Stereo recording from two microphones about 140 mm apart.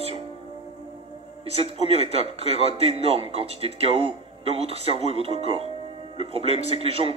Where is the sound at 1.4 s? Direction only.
45° right (ahead or behind).